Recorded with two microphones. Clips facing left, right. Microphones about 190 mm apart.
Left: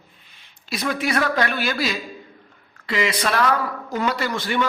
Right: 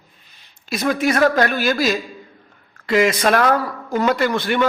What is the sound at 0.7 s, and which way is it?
A man's voice, 45° right (ahead or behind).